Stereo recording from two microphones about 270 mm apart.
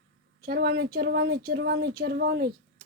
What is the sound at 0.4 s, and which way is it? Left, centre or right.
Speech, right.